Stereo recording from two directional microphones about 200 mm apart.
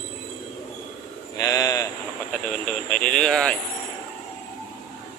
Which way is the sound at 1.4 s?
20° left (ahead or behind).